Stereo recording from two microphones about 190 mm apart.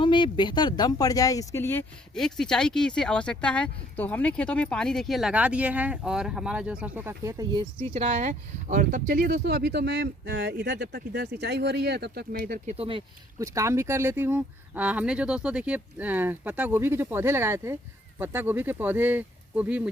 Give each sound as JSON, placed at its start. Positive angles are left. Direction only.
{"t": 0.0, "sound": "speech", "side_deg": 25}
{"t": 2.1, "sound": "speech", "side_deg": 0}
{"t": 7.9, "sound": "speech", "side_deg": -40}
{"t": 12.6, "sound": "speech", "side_deg": -30}
{"t": 13.4, "sound": "speech", "side_deg": -15}